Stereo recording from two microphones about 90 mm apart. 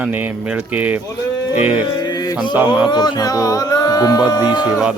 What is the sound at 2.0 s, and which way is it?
Mantra, 45° left (ahead or behind).